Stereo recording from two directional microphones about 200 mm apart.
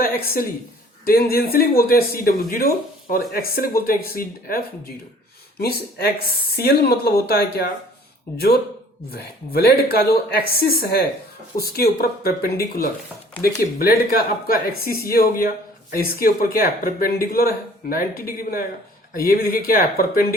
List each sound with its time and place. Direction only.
0.0 s a woman's voice: 50° left (ahead or behind)
9.0 s speech: 50° left (ahead or behind)